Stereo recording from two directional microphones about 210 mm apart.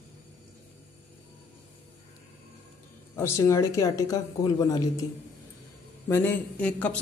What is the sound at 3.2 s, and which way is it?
A man's voice, 15° left (ahead or behind).